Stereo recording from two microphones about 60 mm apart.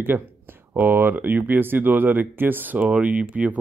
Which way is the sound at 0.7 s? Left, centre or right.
Right.